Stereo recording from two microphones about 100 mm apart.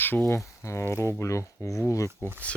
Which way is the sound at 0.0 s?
20° left (ahead or behind).